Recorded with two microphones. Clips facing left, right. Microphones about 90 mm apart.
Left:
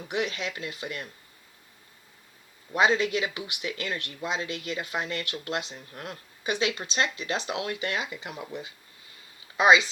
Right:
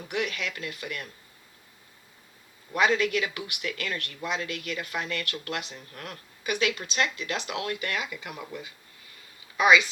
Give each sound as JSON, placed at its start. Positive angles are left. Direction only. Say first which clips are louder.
{"t": 0.1, "sound": "speech", "louder": "left 1 dB", "side_deg": 25}
{"t": 2.7, "sound": "speech", "louder": "left 1 dB", "side_deg": 25}